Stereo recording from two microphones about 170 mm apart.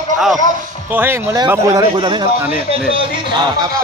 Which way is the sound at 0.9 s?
10° right (ahead or behind).